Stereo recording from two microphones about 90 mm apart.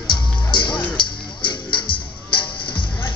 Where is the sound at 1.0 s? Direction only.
65° left (ahead or behind).